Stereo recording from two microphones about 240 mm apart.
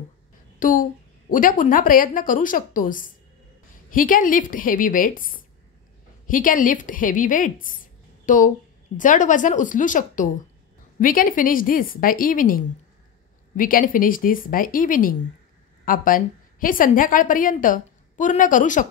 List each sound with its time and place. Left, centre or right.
0.6 s a woman's voice: left